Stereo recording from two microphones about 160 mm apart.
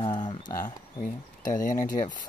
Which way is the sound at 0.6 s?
55° left (ahead or behind).